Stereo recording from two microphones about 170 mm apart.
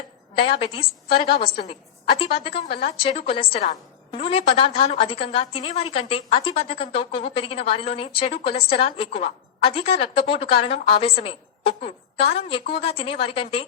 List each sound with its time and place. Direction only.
0.3 s a woman's voice: 30° left (ahead or behind)